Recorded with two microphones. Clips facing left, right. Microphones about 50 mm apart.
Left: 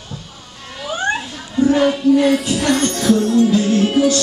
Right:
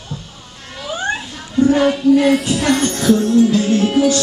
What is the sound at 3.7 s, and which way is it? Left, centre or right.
Music, centre.